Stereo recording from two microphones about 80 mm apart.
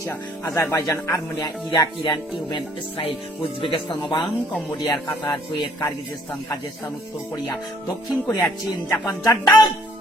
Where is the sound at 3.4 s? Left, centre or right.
Left.